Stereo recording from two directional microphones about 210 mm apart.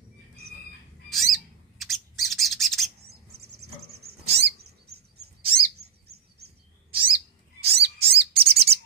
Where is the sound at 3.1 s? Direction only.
50° right (ahead or behind).